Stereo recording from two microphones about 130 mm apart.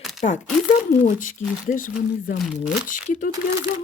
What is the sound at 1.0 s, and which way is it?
Speech, 90° left.